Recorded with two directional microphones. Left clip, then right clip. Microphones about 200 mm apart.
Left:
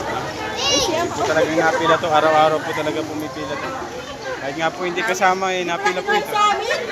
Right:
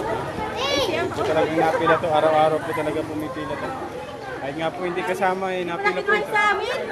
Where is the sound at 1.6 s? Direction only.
5° left (ahead or behind).